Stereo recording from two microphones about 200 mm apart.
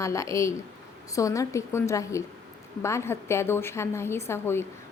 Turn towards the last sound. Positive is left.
turn(degrees=10)  # may be behind; listen again after turning